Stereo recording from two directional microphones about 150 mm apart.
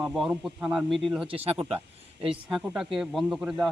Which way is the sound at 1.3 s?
40° right (ahead or behind).